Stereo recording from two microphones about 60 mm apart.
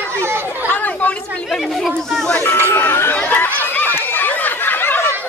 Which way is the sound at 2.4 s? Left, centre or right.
Left.